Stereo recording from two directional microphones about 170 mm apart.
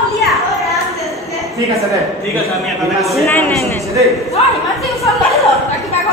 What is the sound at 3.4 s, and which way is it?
Speech, 15° left (ahead or behind).